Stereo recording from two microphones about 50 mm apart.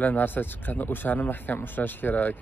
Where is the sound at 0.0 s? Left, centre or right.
Left.